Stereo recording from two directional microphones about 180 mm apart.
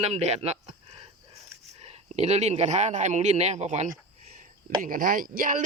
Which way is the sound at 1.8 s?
40° right (ahead or behind).